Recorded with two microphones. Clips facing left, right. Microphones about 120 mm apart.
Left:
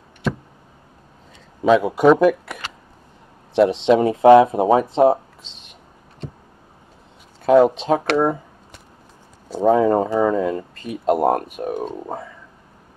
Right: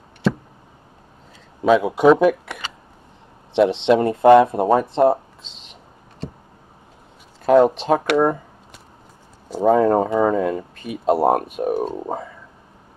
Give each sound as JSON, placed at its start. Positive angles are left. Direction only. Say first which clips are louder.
{"t": 1.6, "sound": "speech", "louder": "even", "side_deg": 0}
{"t": 7.4, "sound": "speech", "louder": "even", "side_deg": 0}
{"t": 9.5, "sound": "speech", "louder": "even", "side_deg": -5}
{"t": 11.2, "sound": "speech", "louder": "right 1 dB", "side_deg": -20}
{"t": 11.6, "sound": "speech", "louder": "right 4 dB", "side_deg": -5}